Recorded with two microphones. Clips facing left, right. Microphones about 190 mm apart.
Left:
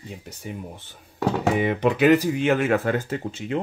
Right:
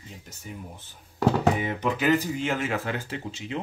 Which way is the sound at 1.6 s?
70° left (ahead or behind).